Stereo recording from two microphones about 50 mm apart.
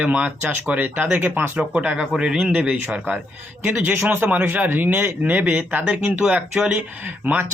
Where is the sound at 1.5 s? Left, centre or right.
Right.